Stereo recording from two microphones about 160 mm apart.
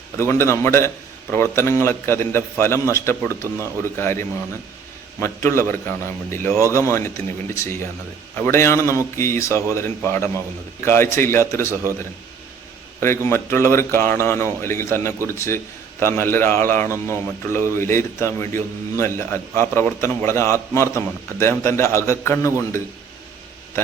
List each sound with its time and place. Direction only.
0.2 s speech: 15° left (ahead or behind)
13.0 s speech: 15° left (ahead or behind)